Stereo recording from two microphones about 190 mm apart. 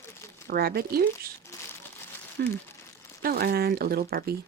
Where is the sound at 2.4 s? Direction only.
55° right (ahead or behind).